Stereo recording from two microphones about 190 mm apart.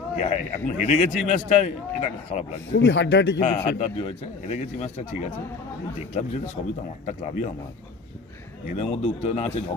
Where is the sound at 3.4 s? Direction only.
40° left (ahead or behind).